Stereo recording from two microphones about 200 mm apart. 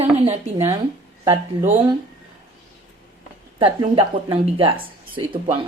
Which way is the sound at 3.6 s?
25° right (ahead or behind).